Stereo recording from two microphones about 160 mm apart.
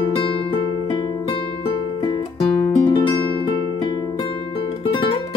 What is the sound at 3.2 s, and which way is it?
Music, 30° left (ahead or behind).